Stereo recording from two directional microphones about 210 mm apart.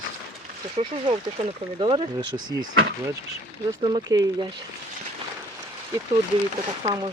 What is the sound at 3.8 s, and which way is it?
Speech, 20° right (ahead or behind).